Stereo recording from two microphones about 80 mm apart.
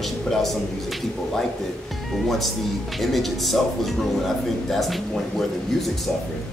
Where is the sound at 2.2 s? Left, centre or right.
Centre.